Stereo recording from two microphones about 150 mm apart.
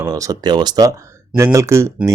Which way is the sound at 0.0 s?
20° right (ahead or behind).